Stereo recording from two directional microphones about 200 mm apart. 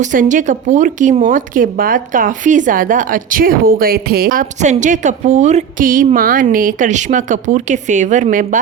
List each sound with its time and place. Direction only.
0.0 s speech: 40° right (ahead or behind)